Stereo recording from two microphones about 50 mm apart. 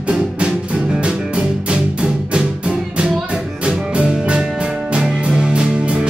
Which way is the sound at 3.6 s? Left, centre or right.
Right.